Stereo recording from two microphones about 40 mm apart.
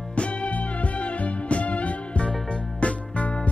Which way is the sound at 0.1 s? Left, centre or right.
Left.